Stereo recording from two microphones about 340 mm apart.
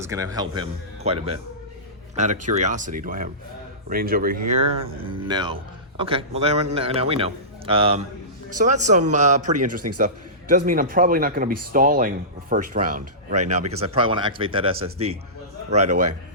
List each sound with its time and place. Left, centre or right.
0.0 s a man's voice: centre
13.4 s speech: right
13.9 s a man's voice: centre